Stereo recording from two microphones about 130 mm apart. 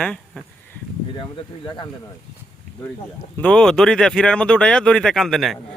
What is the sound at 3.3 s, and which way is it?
Speech, 5° left (ahead or behind).